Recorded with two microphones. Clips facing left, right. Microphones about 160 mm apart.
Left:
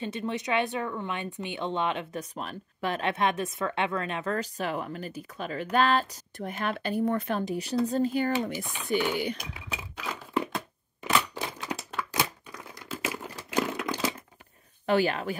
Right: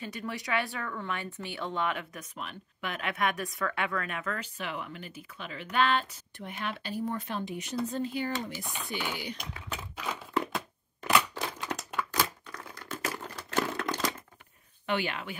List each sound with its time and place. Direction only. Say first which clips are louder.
0.0 s speech: left 6 dB; 25° left (ahead or behind)
2.3 s speech: left 4 dB; 35° left (ahead or behind); by 7.5 s 55° left (ahead or behind)
7.8 s speech: left 6 dB; 40° left (ahead or behind)
9.5 s a sound: left 1 dB; 5° left (ahead or behind)
14.9 s speech: left 7 dB; 40° left (ahead or behind)